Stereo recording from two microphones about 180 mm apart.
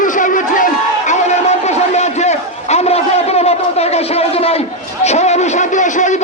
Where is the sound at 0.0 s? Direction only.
45° left (ahead or behind).